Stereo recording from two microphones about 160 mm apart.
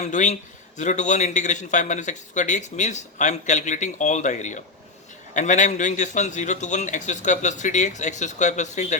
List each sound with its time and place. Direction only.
0.0 s a man's voice: 50° left (ahead or behind)